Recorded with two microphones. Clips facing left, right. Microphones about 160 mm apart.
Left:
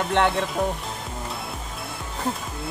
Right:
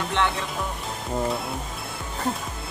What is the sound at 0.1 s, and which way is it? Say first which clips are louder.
Speech: left 4 dB; 55° left (ahead or behind).